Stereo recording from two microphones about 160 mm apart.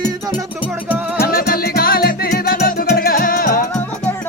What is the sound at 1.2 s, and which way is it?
Music, 70° left (ahead or behind).